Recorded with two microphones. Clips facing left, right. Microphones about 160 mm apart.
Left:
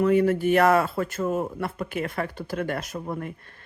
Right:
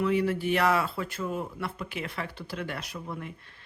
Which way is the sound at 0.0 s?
45° left (ahead or behind).